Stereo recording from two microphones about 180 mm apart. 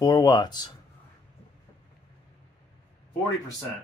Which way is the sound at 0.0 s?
20° left (ahead or behind).